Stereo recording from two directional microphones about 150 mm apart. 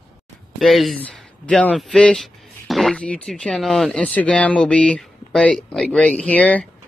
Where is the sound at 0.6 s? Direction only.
Centre (ahead or behind).